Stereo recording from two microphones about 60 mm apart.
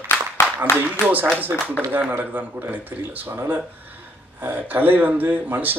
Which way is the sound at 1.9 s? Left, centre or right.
Right.